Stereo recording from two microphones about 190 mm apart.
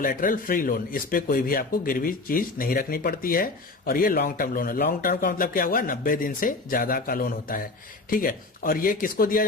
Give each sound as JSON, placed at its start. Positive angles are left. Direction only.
{"t": 0.0, "sound": "speech", "side_deg": 45}